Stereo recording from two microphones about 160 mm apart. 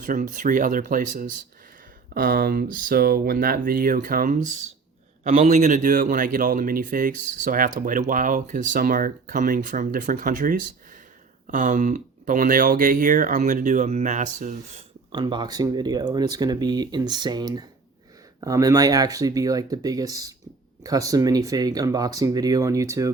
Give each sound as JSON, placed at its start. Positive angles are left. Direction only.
{"t": 0.0, "sound": "speech", "side_deg": -55}
{"t": 2.1, "sound": "speech", "side_deg": -65}
{"t": 5.3, "sound": "speech", "side_deg": -45}
{"t": 15.1, "sound": "speech", "side_deg": -30}